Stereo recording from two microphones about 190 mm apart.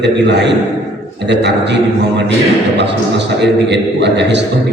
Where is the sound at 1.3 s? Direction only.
65° right (ahead or behind).